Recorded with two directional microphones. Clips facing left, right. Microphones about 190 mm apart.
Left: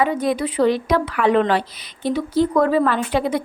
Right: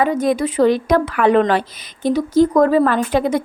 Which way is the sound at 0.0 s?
45° right (ahead or behind).